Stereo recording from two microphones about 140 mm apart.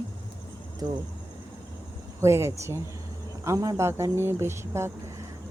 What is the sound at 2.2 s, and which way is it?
Speech, 20° right (ahead or behind).